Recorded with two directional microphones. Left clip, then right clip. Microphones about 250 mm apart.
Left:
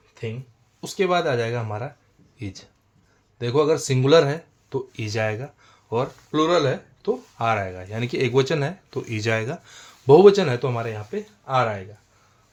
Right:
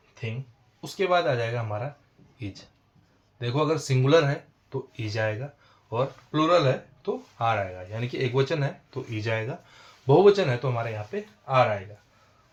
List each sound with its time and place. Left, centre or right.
0.8 s speech: left